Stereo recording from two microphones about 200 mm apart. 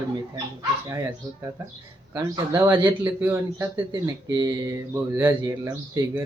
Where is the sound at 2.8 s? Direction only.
10° right (ahead or behind).